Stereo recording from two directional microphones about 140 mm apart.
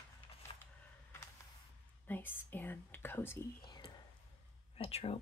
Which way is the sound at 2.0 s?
15° left (ahead or behind).